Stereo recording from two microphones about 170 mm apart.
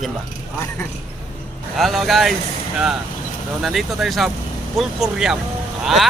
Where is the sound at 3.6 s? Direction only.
Centre (ahead or behind).